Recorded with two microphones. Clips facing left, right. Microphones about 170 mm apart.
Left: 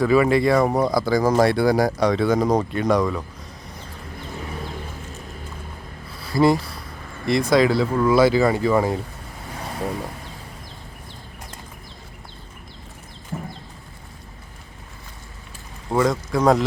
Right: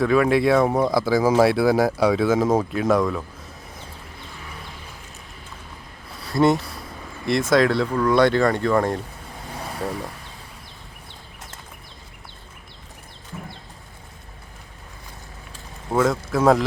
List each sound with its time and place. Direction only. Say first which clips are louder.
0.0 s speech: left 1 dB; centre (ahead or behind)
6.2 s speech: left 1 dB; centre (ahead or behind)
13.3 s a sound: left 5 dB; 40° left (ahead or behind)
15.9 s speech: even; 5° right (ahead or behind)